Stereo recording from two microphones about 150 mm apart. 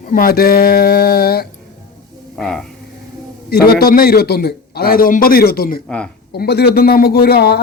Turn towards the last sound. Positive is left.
turn(degrees=90)